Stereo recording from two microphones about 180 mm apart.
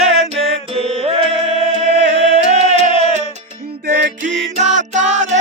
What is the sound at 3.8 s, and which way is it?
Music, 55° right (ahead or behind).